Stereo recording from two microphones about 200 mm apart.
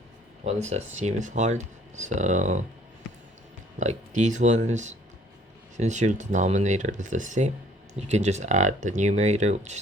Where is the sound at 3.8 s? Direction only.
35° right (ahead or behind).